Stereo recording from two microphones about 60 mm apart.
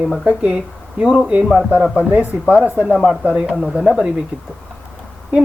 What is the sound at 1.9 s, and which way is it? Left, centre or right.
Speech, right.